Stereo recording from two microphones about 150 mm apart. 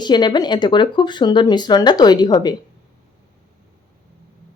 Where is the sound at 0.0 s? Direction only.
30° left (ahead or behind).